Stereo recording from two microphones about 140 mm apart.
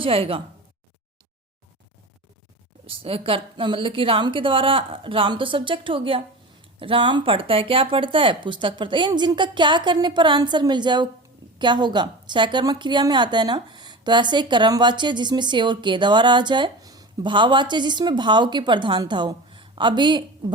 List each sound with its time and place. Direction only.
0.0 s a woman's voice: 40° right (ahead or behind)
2.8 s a woman's voice: 40° right (ahead or behind)